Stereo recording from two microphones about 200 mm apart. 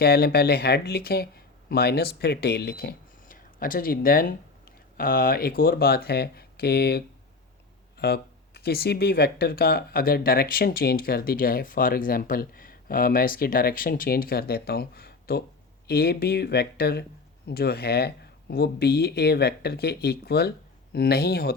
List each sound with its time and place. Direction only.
0.0 s speech: 50° left (ahead or behind)